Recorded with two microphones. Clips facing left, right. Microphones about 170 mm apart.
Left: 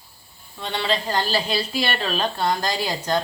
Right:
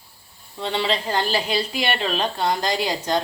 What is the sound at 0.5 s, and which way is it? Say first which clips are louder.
A woman's voice: right 1 dB; 25° right (ahead or behind).